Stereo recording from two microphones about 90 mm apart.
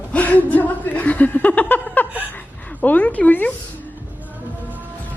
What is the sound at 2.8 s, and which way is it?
Speech, 15° left (ahead or behind).